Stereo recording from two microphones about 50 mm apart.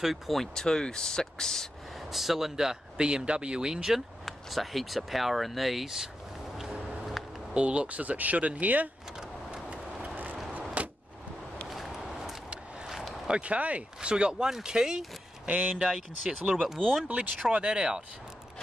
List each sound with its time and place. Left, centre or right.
0.0 s speech: centre
0.6 s speech: centre
2.1 s speech: centre
3.0 s speech: centre
4.3 s speech: centre
7.5 s speech: right
9.5 s vehicle: right
10.8 s a sound: right
11.7 s a sound: centre
13.3 s speech: right
15.4 s speech: right
16.3 s speech: centre